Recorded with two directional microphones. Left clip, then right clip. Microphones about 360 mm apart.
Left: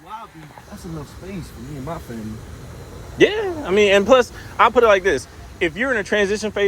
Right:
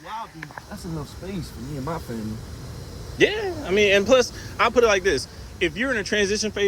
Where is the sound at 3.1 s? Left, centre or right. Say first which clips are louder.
Left 4 dB; centre.